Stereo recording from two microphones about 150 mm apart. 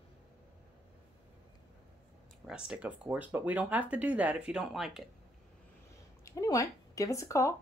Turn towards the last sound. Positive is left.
turn(degrees=20)  # may be behind; listen again after turning